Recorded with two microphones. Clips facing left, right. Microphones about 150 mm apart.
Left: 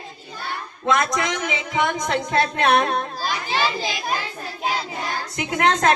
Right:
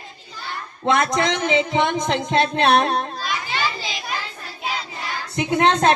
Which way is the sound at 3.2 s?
40° left (ahead or behind).